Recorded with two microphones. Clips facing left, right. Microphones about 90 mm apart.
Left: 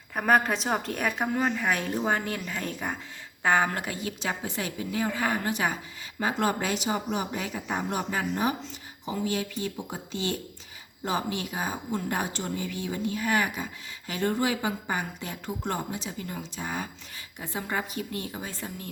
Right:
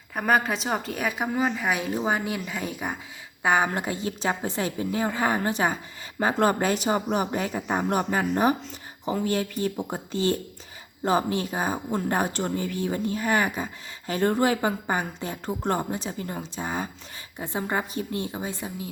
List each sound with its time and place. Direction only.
0.1 s a woman's voice: centre (ahead or behind)